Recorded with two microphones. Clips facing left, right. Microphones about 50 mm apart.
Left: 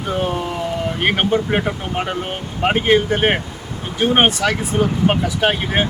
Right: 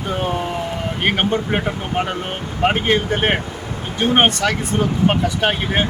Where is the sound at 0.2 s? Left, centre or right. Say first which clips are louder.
Left 1 dB; centre.